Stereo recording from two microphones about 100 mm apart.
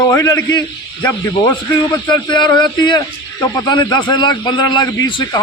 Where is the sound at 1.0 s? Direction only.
15° left (ahead or behind).